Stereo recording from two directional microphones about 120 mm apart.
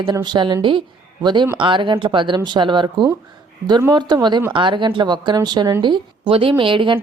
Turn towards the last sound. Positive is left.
turn(degrees=-45)  # may be behind; listen again after turning